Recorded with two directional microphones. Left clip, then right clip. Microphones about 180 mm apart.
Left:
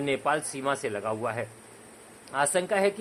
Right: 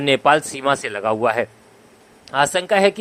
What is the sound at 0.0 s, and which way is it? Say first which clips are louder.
Speech: right 12 dB; 35° right (ahead or behind).